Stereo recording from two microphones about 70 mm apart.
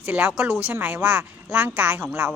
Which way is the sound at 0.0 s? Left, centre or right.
Right.